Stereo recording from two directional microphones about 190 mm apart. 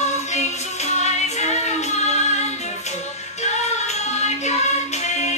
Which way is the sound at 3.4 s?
35° left (ahead or behind).